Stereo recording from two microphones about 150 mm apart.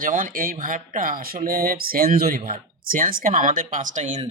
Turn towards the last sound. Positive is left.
turn(degrees=-55)  # may be behind; listen again after turning